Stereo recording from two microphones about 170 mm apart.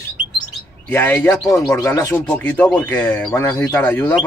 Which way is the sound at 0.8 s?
10° left (ahead or behind).